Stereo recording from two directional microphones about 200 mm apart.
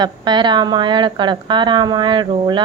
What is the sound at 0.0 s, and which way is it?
A woman's voice, 20° right (ahead or behind).